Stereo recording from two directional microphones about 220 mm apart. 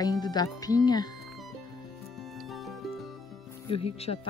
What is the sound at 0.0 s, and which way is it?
Speech, 20° left (ahead or behind).